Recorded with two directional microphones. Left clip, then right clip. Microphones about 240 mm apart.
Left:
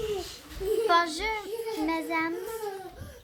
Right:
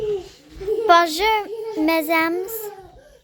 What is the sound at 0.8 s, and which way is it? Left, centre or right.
A child's voice, right.